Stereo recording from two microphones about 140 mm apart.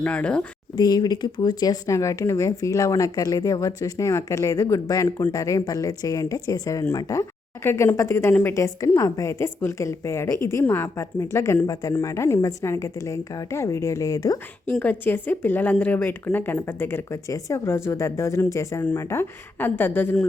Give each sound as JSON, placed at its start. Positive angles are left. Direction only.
{"t": 0.0, "sound": "speech", "side_deg": 10}
{"t": 0.8, "sound": "speech", "side_deg": 30}
{"t": 14.7, "sound": "speech", "side_deg": 10}